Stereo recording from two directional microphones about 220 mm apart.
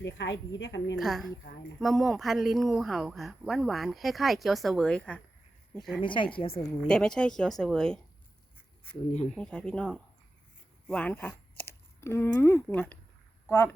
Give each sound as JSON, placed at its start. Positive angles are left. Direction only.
{"t": 0.0, "sound": "a woman's voice", "side_deg": 55}
{"t": 0.9, "sound": "speech", "side_deg": 0}
{"t": 6.0, "sound": "speech", "side_deg": 20}
{"t": 6.8, "sound": "speech", "side_deg": 5}
{"t": 9.3, "sound": "speech", "side_deg": 5}